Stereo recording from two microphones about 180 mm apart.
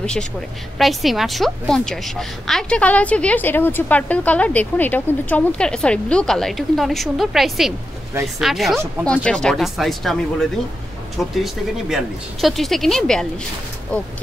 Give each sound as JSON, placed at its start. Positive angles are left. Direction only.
{"t": 0.7, "sound": "a woman's voice", "side_deg": 0}